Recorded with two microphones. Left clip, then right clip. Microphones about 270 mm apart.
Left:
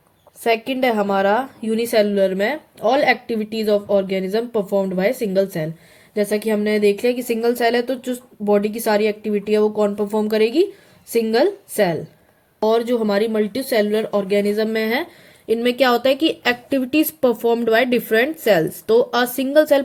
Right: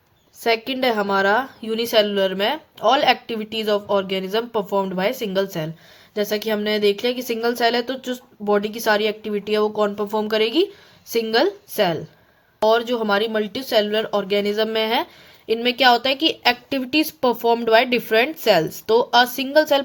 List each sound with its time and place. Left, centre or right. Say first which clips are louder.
0.4 s a woman's voice: left 2 dB; centre